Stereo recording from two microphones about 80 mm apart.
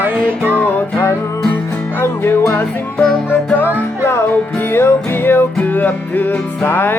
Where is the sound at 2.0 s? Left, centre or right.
Left.